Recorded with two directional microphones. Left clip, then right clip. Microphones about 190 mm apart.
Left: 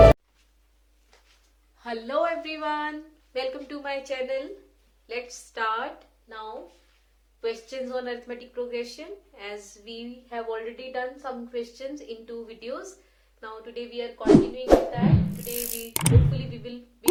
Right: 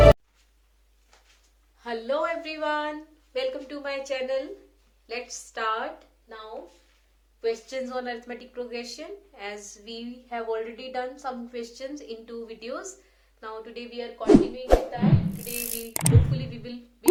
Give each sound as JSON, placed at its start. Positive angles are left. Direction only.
{"t": 1.8, "sound": "music", "side_deg": 10}
{"t": 5.0, "sound": "a woman's voice", "side_deg": -15}
{"t": 7.4, "sound": "a woman's voice", "side_deg": -20}
{"t": 14.5, "sound": "music", "side_deg": 0}
{"t": 16.3, "sound": "speech", "side_deg": -20}